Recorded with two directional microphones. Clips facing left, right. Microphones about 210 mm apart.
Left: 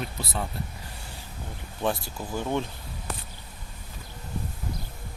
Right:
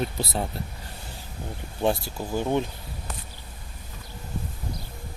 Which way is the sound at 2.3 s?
20° right (ahead or behind).